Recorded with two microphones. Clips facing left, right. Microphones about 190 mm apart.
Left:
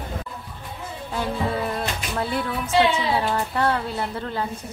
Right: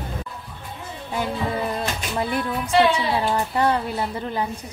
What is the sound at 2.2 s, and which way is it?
A woman's voice, 15° right (ahead or behind).